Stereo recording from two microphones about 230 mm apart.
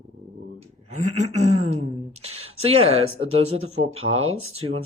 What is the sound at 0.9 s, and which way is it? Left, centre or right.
Speech, right.